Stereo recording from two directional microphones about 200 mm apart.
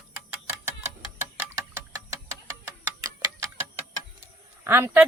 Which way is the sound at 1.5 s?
15° right (ahead or behind).